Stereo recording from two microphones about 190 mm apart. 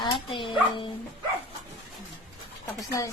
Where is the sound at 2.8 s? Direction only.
15° left (ahead or behind).